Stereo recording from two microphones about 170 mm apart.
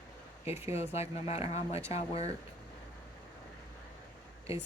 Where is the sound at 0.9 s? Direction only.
40° left (ahead or behind).